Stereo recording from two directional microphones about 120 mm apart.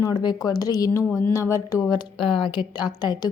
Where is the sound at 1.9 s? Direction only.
45° left (ahead or behind).